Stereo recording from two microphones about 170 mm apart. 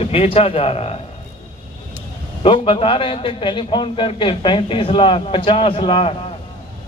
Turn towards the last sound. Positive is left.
turn(degrees=30)  # may be behind; listen again after turning